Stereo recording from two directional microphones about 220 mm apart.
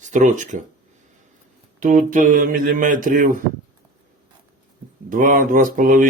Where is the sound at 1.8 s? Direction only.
35° right (ahead or behind).